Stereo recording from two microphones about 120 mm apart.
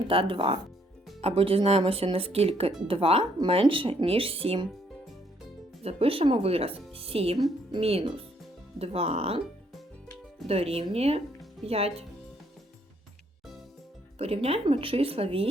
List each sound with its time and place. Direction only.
0.1 s speech: 50° right (ahead or behind)
5.8 s speech: 55° right (ahead or behind)
10.4 s speech: 55° right (ahead or behind)
14.2 s speech: 55° right (ahead or behind)